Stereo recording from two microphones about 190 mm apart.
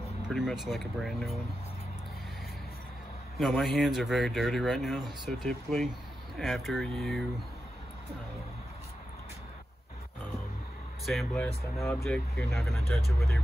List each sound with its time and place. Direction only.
0.3 s speech: centre (ahead or behind)
3.3 s speech: centre (ahead or behind)
11.1 s speech: centre (ahead or behind)